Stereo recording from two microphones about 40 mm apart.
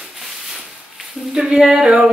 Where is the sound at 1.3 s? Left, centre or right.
Centre.